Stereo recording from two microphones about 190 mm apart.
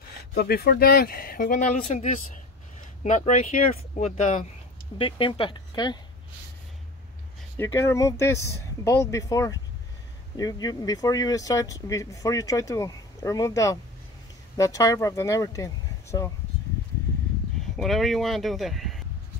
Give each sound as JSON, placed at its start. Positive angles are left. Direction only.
{"t": 0.2, "sound": "speech", "side_deg": 55}
{"t": 7.5, "sound": "speech", "side_deg": 15}
{"t": 17.6, "sound": "speech", "side_deg": 0}